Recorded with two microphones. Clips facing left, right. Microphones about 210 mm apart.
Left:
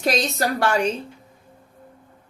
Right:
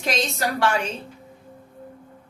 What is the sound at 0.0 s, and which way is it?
Speech, 40° left (ahead or behind).